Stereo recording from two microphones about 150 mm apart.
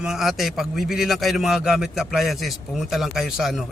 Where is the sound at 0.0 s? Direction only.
Centre (ahead or behind).